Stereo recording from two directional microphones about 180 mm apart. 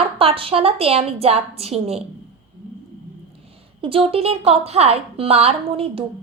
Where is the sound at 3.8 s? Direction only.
30° right (ahead or behind).